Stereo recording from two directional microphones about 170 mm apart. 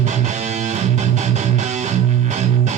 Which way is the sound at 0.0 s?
45° right (ahead or behind).